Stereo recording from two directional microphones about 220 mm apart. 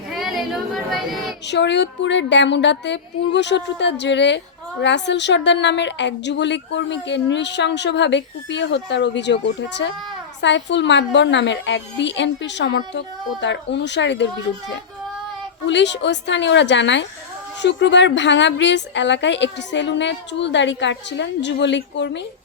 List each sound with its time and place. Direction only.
0.1 s child singing: centre (ahead or behind)
1.5 s a woman's voice: 50° left (ahead or behind)
15.6 s a woman's voice: 55° left (ahead or behind)